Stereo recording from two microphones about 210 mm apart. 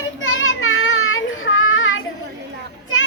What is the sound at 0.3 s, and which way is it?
Child singing, 75° left (ahead or behind).